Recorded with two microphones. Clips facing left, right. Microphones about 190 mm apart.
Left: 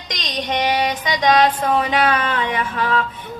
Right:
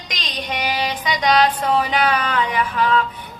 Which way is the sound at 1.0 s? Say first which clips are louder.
Even; 25° left (ahead or behind).